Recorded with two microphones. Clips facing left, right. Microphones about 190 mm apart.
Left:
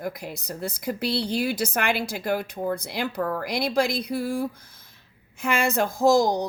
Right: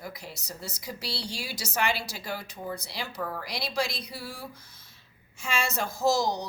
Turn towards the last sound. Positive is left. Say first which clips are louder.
# left 7 dB
turn(degrees=55)  # may be behind; listen again after turning